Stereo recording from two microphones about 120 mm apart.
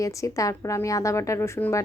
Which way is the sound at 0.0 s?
25° left (ahead or behind).